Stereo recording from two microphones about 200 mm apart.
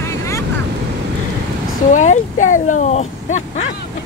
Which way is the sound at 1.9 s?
40° left (ahead or behind).